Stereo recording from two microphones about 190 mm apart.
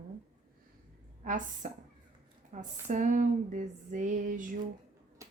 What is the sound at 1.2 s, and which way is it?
Speech, 45° right (ahead or behind).